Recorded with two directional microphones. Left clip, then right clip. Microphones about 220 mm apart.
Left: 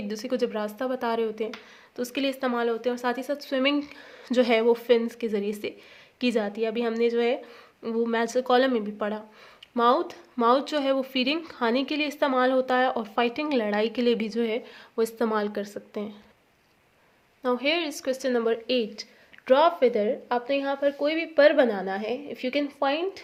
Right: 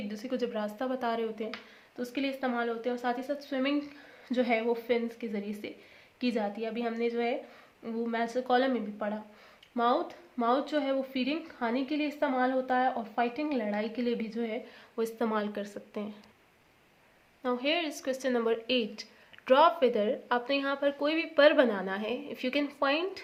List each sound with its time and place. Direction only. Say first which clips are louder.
0.1 s a woman's voice: left 7 dB; 35° left (ahead or behind)
15.0 s a woman's voice: left 5 dB; 25° left (ahead or behind)
17.4 s a woman's voice: left 5 dB; 30° left (ahead or behind); by 23.2 s 15° left (ahead or behind)